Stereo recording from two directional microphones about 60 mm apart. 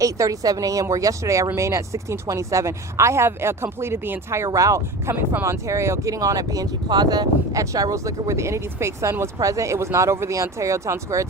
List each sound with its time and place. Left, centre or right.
0.0 s speech: right
4.4 s speech: right
7.1 s speech: right